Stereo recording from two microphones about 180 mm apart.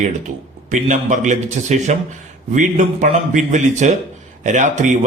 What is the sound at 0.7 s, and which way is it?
A man's voice, 45° right (ahead or behind).